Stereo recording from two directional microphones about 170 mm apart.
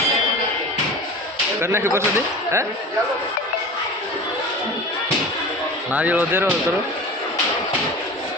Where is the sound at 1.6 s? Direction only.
15° right (ahead or behind).